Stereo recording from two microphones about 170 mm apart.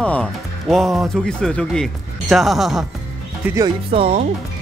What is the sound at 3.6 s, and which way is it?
Speech, 35° right (ahead or behind).